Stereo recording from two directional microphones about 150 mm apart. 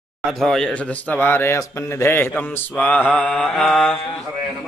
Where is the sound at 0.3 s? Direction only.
Centre (ahead or behind).